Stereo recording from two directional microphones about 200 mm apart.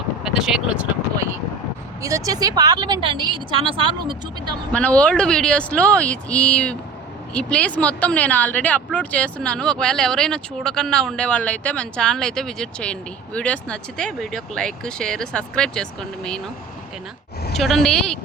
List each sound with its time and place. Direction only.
0.3 s speech: centre (ahead or behind)
2.0 s speech: 15° right (ahead or behind)
4.7 s speech: 5° left (ahead or behind)
17.5 s speech: centre (ahead or behind)